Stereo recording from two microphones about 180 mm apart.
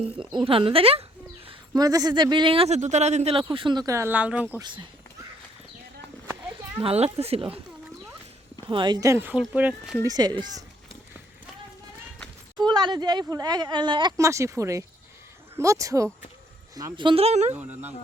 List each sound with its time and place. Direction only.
0.3 s speech: 25° right (ahead or behind)
1.5 s a man's voice: 20° right (ahead or behind)
6.8 s speech: 35° right (ahead or behind)
8.7 s speech: 25° right (ahead or behind); by 10.0 s 5° right (ahead or behind)
10.0 s a man's voice: 20° right (ahead or behind)
12.5 s a man's voice: 25° right (ahead or behind)
17.5 s speech: 10° right (ahead or behind)